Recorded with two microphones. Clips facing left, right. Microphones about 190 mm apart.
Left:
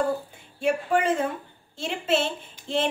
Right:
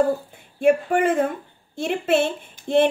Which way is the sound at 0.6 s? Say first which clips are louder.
Right 6 dB; 55° right (ahead or behind).